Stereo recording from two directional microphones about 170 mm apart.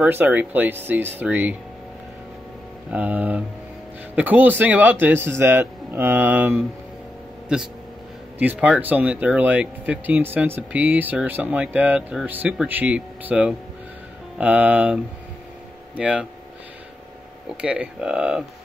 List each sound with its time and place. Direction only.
0.0 s speech: 10° right (ahead or behind)
2.9 s speech: 10° right (ahead or behind)
8.4 s speech: 10° right (ahead or behind)
16.0 s speech: 5° right (ahead or behind)
17.6 s speech: 5° right (ahead or behind)